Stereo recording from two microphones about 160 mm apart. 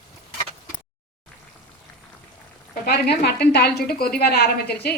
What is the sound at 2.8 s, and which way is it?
A woman's voice, 90° left.